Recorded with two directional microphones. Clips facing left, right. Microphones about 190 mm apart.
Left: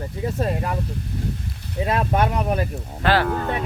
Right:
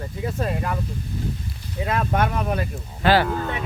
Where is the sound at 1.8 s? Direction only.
25° left (ahead or behind).